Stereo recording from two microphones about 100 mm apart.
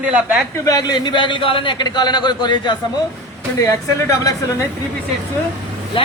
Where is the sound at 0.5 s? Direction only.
35° left (ahead or behind); by 2.7 s 50° left (ahead or behind).